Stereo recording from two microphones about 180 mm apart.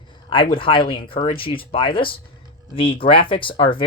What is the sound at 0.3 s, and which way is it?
Speech, 30° left (ahead or behind).